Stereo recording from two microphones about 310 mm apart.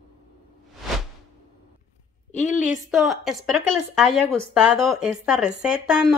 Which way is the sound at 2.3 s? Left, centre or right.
Left.